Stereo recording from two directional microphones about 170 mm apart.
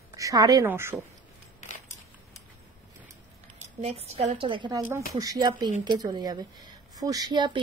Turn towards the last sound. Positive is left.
turn(degrees=-25)  # may be behind; listen again after turning